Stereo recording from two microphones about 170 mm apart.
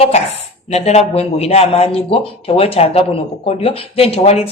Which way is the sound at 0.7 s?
40° left (ahead or behind).